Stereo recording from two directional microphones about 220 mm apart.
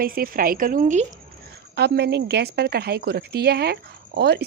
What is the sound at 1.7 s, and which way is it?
A woman's voice, 50° right (ahead or behind).